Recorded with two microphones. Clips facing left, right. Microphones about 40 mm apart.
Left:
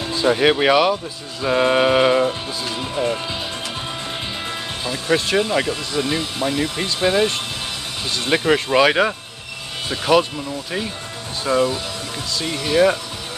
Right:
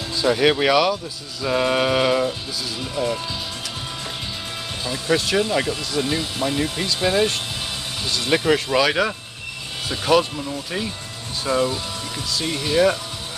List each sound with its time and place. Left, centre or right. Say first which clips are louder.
0.1 s speech: left 2 dB; centre
2.2 s speech: left 3 dB; left
4.8 s speech: left 1 dB; centre